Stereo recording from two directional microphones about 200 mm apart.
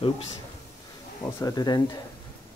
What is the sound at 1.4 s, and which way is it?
Speech, 20° left (ahead or behind).